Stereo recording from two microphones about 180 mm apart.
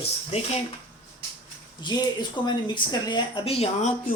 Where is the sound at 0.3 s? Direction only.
35° left (ahead or behind).